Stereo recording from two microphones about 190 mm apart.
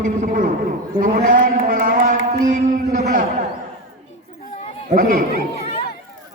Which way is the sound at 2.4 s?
40° right (ahead or behind).